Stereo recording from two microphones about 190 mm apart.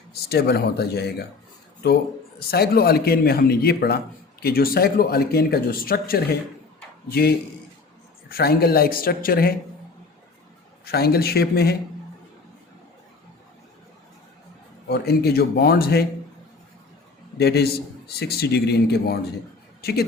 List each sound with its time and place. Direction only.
0.1 s speech: 55° left (ahead or behind)
2.5 s a man's voice: 55° left (ahead or behind)
10.8 s speech: 55° left (ahead or behind)
14.8 s speech: 55° left (ahead or behind)
17.3 s a man's voice: 60° left (ahead or behind)